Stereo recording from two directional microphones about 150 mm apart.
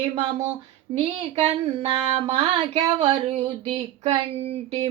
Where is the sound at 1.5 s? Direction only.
45° right (ahead or behind).